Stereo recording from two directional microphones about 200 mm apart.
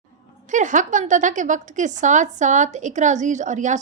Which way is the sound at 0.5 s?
40° right (ahead or behind).